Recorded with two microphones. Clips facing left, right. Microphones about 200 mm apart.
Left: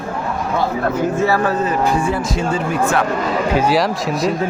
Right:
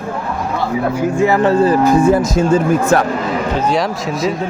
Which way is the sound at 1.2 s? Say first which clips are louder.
Right 8 dB; 20° right (ahead or behind).